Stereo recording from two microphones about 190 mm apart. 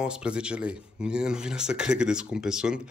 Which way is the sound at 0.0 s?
5° right (ahead or behind).